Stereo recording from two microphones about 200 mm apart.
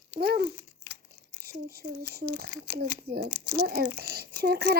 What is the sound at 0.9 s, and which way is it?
Tearing, 25° left (ahead or behind).